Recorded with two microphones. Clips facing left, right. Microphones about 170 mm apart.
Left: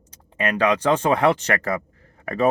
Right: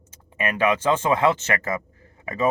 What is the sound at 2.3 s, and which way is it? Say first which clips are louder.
Speech: left 3 dB; 60° left (ahead or behind).